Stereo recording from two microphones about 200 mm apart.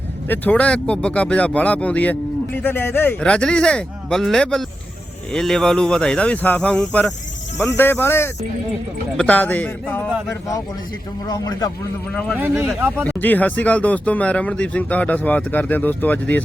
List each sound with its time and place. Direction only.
0.3 s speech: 5° left (ahead or behind)
11.3 s speech: 15° left (ahead or behind)
12.1 s speech: 5° left (ahead or behind)
12.6 s speech: 10° right (ahead or behind)
13.1 s speech: 10° left (ahead or behind)